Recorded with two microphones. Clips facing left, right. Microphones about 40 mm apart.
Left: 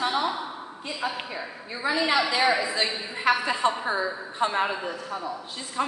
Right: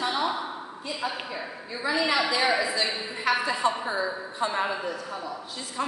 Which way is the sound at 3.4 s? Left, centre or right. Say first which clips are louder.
Left 1 dB; left.